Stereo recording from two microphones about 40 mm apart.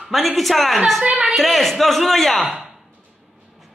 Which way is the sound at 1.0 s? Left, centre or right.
Right.